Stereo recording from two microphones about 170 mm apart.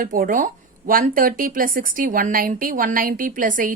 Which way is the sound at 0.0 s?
55° right (ahead or behind).